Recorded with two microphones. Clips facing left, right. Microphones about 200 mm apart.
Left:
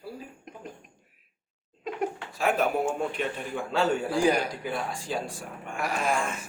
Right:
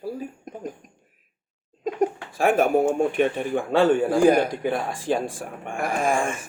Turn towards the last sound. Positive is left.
turn(degrees=-50)  # may be behind; listen again after turning